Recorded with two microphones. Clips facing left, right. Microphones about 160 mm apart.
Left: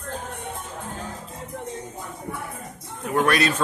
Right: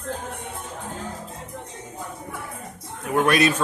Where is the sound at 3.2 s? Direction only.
20° right (ahead or behind).